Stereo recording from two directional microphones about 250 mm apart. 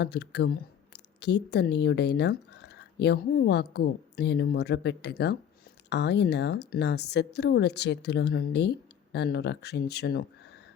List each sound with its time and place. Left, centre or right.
0.0 s speech: left